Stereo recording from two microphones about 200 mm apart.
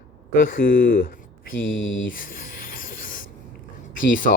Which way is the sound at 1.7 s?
70° left (ahead or behind).